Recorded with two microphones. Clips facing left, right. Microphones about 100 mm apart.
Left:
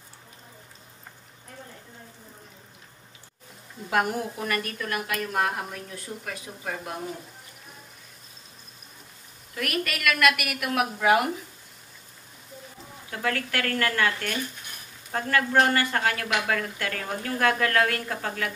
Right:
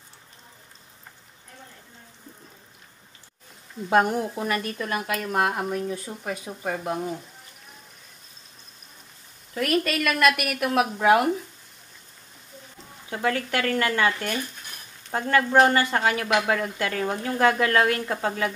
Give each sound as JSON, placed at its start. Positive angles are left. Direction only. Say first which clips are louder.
{"t": 3.9, "sound": "a woman's voice", "louder": "right 5 dB", "side_deg": -25}
{"t": 9.6, "sound": "a woman's voice", "louder": "right 6 dB", "side_deg": -30}
{"t": 13.1, "sound": "a woman's voice", "louder": "right 3 dB", "side_deg": -20}